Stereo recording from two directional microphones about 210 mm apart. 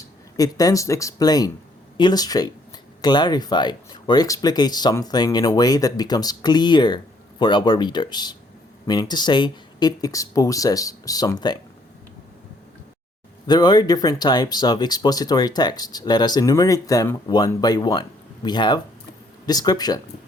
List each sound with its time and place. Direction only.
0.3 s speech: 15° left (ahead or behind)
13.5 s speech: 20° left (ahead or behind)